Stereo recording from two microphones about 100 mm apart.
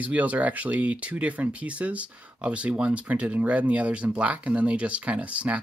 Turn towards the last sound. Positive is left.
turn(degrees=-10)  # may be behind; listen again after turning